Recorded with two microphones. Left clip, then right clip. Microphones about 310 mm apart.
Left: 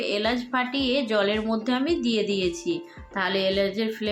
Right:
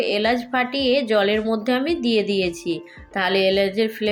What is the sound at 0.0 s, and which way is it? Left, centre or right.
A woman's voice, centre.